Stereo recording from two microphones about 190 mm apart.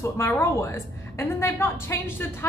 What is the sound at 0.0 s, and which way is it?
A woman's voice, 15° left (ahead or behind).